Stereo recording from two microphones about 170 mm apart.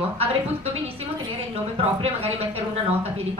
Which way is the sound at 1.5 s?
35° right (ahead or behind).